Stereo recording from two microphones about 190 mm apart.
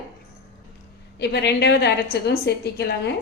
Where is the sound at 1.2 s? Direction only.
60° left (ahead or behind).